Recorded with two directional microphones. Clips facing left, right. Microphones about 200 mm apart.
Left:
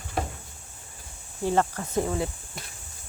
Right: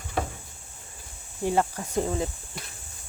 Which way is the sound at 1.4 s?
15° right (ahead or behind).